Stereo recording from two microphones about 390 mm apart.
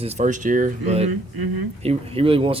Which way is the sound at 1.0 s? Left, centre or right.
Right.